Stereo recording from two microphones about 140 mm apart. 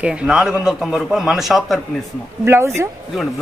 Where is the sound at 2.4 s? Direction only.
15° right (ahead or behind).